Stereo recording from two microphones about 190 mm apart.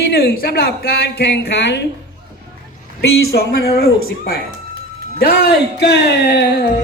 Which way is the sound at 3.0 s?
55° left (ahead or behind).